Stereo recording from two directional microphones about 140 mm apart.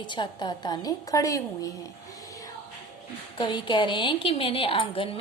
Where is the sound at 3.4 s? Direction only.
35° left (ahead or behind).